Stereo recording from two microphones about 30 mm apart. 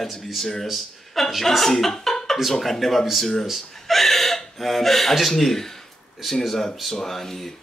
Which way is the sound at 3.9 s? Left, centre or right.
Centre.